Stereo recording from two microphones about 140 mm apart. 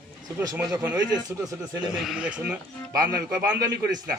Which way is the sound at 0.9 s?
30° right (ahead or behind).